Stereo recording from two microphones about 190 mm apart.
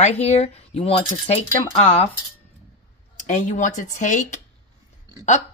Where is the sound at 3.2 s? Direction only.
40° left (ahead or behind).